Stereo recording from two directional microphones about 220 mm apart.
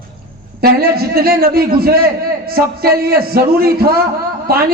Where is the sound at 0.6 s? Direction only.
45° right (ahead or behind).